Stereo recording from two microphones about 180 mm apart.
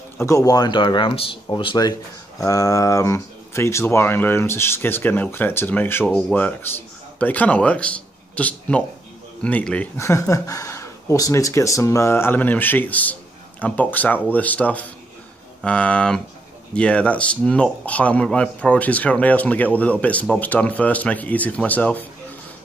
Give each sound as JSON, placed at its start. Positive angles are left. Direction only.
{"t": 0.2, "sound": "speech", "side_deg": 20}